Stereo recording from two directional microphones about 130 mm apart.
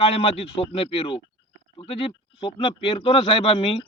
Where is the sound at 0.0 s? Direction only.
45° left (ahead or behind).